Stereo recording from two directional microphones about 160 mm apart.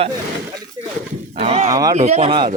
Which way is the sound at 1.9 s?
40° right (ahead or behind).